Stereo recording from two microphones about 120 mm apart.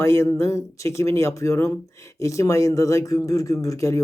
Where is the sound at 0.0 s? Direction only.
20° left (ahead or behind).